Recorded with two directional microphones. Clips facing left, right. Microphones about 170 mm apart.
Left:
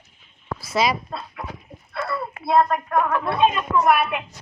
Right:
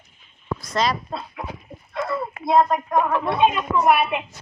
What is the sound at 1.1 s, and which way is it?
Speech, 20° right (ahead or behind).